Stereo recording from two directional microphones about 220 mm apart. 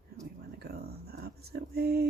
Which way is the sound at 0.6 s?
45° right (ahead or behind).